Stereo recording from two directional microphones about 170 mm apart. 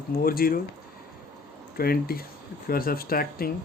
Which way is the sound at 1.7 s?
60° left (ahead or behind).